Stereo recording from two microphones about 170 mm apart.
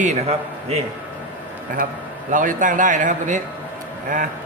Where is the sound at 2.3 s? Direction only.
50° right (ahead or behind).